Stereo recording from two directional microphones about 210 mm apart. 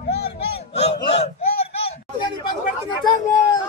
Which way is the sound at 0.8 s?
30° left (ahead or behind).